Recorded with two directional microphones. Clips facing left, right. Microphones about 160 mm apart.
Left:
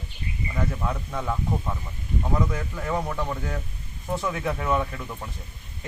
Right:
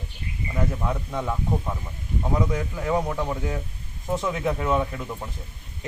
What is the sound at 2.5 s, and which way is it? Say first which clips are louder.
A man's voice: right 4 dB; 15° right (ahead or behind).